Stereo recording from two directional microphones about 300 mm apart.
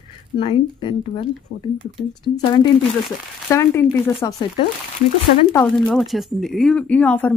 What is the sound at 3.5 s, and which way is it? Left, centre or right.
Speech, centre.